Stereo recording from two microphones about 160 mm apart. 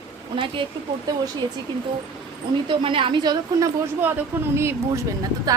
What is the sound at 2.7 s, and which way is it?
A woman's voice, 30° right (ahead or behind).